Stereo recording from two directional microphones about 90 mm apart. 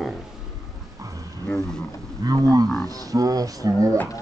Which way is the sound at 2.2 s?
45° right (ahead or behind).